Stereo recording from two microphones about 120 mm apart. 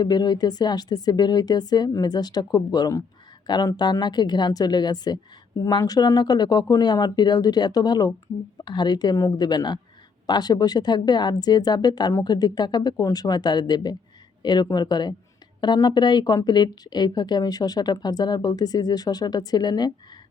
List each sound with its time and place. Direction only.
0.0 s a woman's voice: 35° left (ahead or behind)